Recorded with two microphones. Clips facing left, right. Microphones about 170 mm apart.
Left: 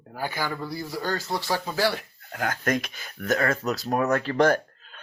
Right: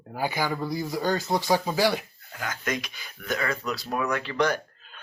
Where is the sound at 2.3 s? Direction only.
55° left (ahead or behind).